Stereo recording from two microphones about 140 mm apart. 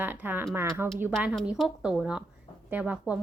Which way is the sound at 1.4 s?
5° right (ahead or behind).